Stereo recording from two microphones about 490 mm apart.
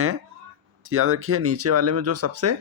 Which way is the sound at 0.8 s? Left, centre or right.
Right.